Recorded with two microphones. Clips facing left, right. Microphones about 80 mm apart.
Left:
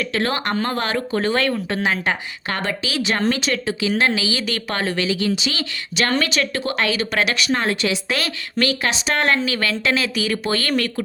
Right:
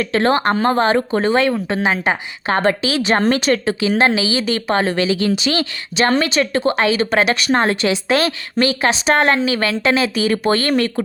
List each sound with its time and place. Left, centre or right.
0.0 s speech: right
2.6 s a woman's voice: right
5.3 s speech: right
6.0 s a woman's voice: right